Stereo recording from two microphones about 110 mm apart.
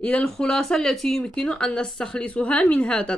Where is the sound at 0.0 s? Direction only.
10° left (ahead or behind).